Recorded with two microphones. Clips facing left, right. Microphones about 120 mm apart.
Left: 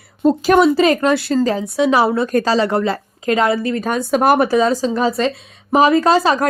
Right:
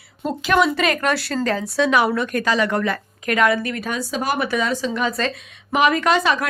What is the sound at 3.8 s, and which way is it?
A woman's voice, 50° left (ahead or behind).